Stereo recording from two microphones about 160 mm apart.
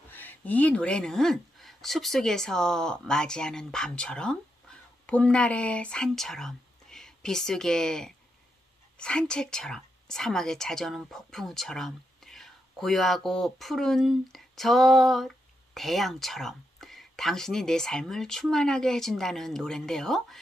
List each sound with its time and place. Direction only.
0.1 s a woman's voice: 10° left (ahead or behind)